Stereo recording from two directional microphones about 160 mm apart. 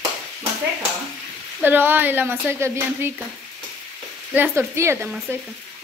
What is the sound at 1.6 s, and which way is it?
Speech, 10° right (ahead or behind).